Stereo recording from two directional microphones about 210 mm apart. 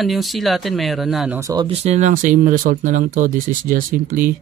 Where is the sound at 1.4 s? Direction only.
15° right (ahead or behind).